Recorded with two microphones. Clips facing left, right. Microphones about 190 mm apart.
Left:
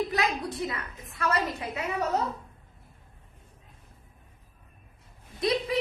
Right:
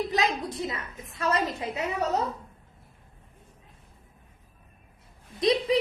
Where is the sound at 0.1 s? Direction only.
25° right (ahead or behind).